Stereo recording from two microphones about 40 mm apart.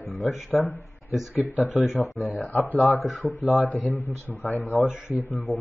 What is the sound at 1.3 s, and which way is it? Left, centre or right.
Speech, right.